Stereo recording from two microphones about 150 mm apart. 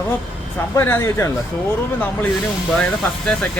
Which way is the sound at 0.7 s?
20° left (ahead or behind).